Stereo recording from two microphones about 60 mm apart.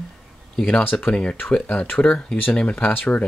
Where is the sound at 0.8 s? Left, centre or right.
Left.